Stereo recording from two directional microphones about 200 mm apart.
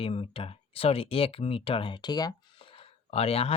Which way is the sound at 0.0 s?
30° left (ahead or behind).